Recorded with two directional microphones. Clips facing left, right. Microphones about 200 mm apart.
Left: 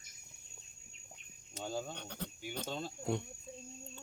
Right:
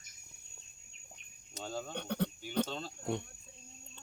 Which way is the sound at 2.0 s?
60° right (ahead or behind).